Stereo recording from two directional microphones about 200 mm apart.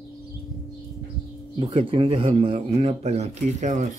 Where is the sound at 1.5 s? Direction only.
25° right (ahead or behind).